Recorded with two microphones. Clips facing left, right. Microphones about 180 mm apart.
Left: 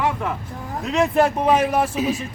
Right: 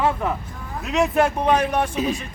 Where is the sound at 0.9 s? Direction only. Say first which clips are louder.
Left 1 dB; centre (ahead or behind).